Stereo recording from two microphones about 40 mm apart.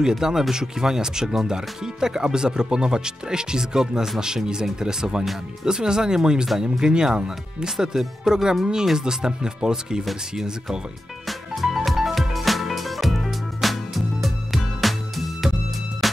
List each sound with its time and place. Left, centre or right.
0.0 s speech: centre
11.2 s music: centre